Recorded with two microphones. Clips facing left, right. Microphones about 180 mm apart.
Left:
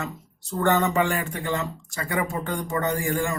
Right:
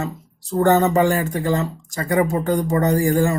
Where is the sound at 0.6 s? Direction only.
35° right (ahead or behind).